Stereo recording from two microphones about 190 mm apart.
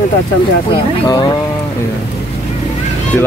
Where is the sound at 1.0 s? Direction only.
20° left (ahead or behind).